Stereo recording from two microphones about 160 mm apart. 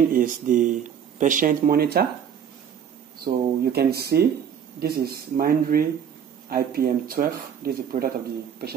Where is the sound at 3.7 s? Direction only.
80° right.